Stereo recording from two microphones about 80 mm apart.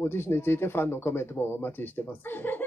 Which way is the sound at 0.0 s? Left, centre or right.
Left.